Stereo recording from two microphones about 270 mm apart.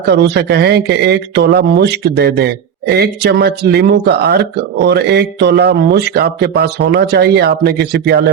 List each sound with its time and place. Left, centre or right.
0.1 s speech: right